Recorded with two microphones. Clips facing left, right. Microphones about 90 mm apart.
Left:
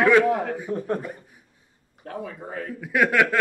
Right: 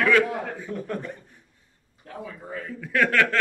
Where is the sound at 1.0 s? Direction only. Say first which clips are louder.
Left 1 dB; 10° left (ahead or behind).